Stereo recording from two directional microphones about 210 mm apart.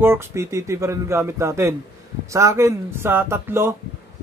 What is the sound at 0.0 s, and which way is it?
Speech, 10° right (ahead or behind).